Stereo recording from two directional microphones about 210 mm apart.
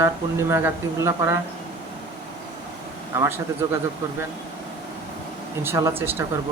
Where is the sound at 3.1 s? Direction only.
10° right (ahead or behind).